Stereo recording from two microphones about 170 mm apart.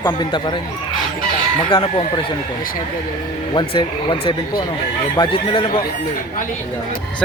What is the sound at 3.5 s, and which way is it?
Speech, 30° left (ahead or behind).